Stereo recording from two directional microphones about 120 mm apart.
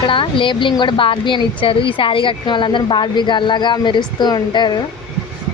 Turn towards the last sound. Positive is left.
turn(degrees=35)  # may be behind; listen again after turning